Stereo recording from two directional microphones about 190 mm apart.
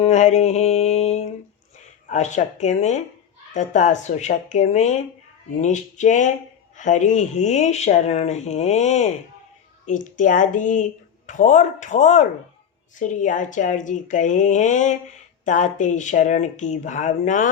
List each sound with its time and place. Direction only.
0.0 s music: 35° left (ahead or behind)
2.0 s speech: 40° left (ahead or behind)